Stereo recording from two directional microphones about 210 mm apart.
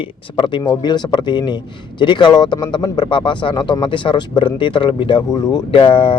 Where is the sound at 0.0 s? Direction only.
25° left (ahead or behind).